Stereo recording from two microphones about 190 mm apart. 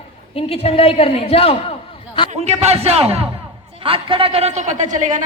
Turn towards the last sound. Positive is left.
turn(degrees=-40)  # may be behind; listen again after turning